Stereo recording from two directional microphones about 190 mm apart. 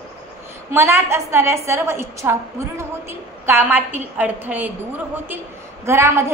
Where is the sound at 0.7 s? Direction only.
15° right (ahead or behind).